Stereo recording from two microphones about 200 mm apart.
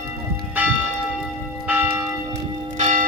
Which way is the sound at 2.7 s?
35° right (ahead or behind).